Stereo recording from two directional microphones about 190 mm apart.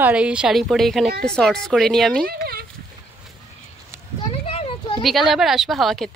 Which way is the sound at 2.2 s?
55° right (ahead or behind).